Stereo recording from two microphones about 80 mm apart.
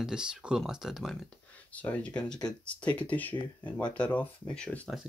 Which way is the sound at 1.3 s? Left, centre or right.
Centre.